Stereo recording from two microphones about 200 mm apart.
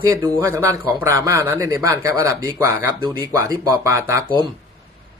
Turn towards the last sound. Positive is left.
turn(degrees=-20)  # may be behind; listen again after turning